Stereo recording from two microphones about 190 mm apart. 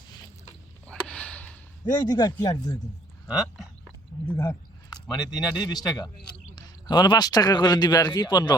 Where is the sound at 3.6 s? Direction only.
5° left (ahead or behind).